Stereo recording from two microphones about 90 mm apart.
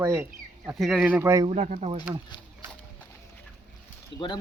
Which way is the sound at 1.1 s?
20° right (ahead or behind).